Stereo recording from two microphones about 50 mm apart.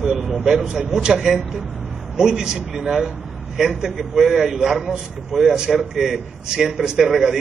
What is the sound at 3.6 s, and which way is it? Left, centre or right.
A man's voice, centre.